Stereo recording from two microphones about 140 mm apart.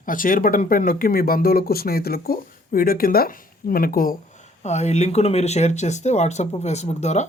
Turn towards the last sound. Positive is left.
turn(degrees=55)  # may be behind; listen again after turning